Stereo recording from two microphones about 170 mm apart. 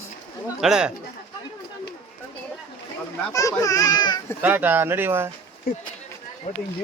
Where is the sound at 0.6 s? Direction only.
5° right (ahead or behind).